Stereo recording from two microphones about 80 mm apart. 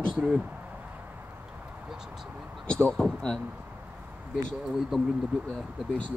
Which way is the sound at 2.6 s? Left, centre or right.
Centre.